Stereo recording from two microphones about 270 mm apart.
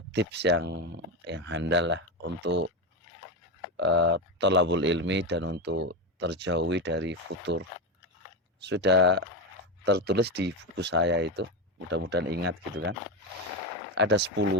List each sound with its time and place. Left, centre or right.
0.1 s speech: right
3.8 s speech: right
8.6 s speech: right
13.9 s speech: right